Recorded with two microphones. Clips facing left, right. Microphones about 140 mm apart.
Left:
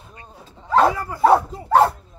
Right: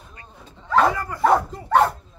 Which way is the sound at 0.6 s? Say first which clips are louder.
Left 2 dB; 30° left (ahead or behind).